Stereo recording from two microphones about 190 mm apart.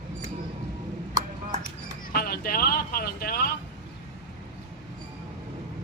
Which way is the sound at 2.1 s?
50° left (ahead or behind).